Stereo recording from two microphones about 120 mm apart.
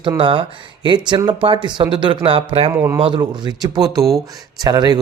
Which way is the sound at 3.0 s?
45° right (ahead or behind).